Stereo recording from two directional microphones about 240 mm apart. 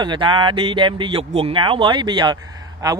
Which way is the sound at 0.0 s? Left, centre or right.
Centre.